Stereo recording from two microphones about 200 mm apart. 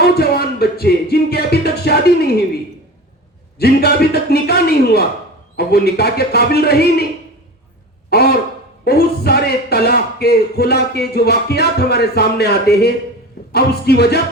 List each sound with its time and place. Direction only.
0.0 s music: 50° left (ahead or behind)
3.6 s speech: 50° left (ahead or behind)
8.1 s speech: 50° left (ahead or behind)